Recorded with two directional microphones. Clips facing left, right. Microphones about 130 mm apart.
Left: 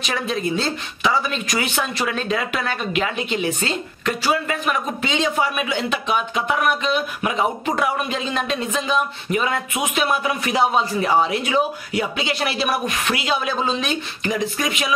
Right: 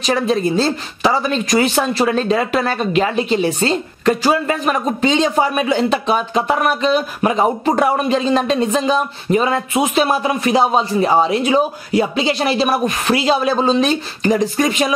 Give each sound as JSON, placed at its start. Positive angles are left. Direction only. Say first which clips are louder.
{"t": 0.0, "sound": "speech", "louder": "right 7 dB", "side_deg": -35}